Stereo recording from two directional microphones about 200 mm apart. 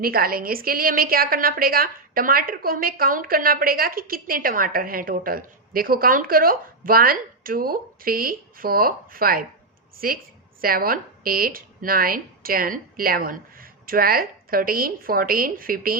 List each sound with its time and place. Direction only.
0.0 s a woman's voice: 50° right (ahead or behind)